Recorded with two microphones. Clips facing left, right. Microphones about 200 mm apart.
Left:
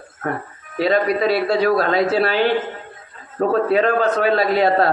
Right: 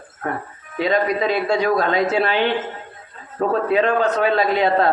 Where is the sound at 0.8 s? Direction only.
35° left (ahead or behind).